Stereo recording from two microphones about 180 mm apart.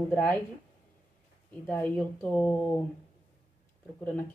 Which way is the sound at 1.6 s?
10° left (ahead or behind).